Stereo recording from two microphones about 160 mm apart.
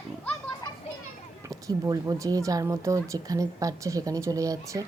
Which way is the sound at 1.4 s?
20° right (ahead or behind).